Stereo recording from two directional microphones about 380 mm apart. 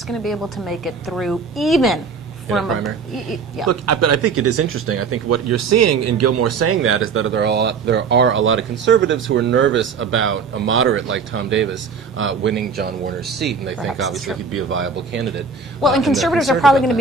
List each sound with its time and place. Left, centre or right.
0.1 s a woman's voice: centre
3.6 s speech: right
13.7 s a woman's voice: centre
14.5 s speech: right
15.8 s a woman's voice: centre